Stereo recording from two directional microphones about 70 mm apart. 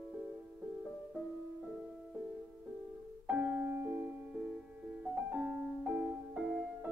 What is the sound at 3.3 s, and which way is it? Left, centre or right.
Music, right.